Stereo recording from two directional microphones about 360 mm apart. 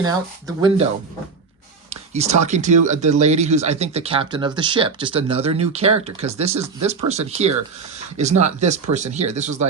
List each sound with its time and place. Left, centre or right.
0.0 s speech: centre
1.9 s speech: centre